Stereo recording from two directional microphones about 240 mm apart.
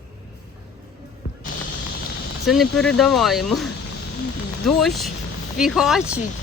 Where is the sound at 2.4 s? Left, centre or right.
Centre.